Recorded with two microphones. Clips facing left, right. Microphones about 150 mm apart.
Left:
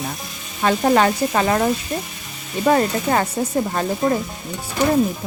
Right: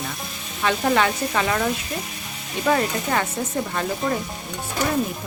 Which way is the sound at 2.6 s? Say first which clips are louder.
Left 4 dB; 40° left (ahead or behind).